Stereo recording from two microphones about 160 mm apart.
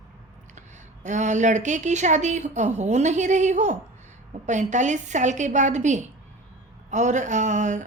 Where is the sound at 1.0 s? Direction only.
50° right (ahead or behind).